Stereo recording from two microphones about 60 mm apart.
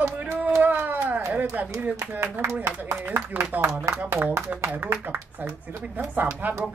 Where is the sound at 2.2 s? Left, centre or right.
Right.